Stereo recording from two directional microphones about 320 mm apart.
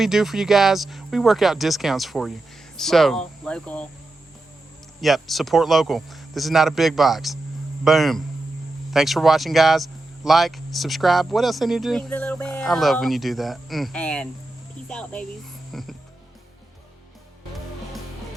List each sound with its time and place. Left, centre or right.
0.0 s speech: centre
4.9 s speech: centre